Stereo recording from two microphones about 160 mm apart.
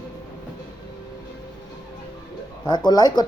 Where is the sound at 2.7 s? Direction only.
25° left (ahead or behind).